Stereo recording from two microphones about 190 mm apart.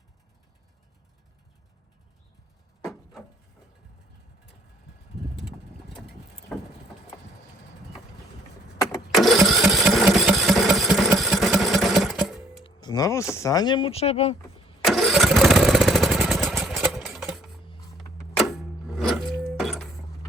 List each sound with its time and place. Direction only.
2.9 s a sound: centre (ahead or behind)
5.4 s vehicle: centre (ahead or behind)
9.1 s engine: centre (ahead or behind)
11.2 s sewing machine: centre (ahead or behind)
12.6 s music: 20° left (ahead or behind)
13.3 s speech: 15° left (ahead or behind); by 14.3 s 35° left (ahead or behind)
14.8 s engine starting: centre (ahead or behind)
18.9 s music: centre (ahead or behind)